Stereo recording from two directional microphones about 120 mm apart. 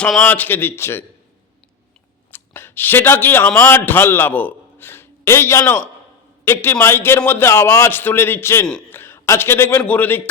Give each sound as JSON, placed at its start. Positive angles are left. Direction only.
{"t": 0.0, "sound": "a man's voice", "side_deg": 10}
{"t": 2.3, "sound": "a man's voice", "side_deg": 20}